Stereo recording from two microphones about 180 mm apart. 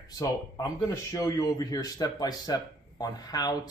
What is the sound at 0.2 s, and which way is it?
A man's voice, 20° left (ahead or behind).